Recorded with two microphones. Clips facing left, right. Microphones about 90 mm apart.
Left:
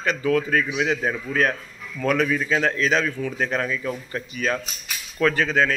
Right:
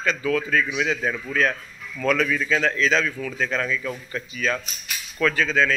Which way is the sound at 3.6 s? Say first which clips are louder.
Left 1 dB; 30° left (ahead or behind).